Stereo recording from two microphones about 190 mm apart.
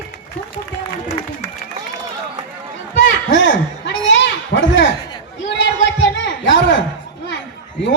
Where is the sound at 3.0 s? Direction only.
75° left (ahead or behind).